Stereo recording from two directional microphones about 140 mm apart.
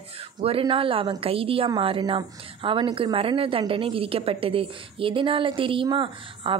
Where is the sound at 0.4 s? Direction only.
40° right (ahead or behind).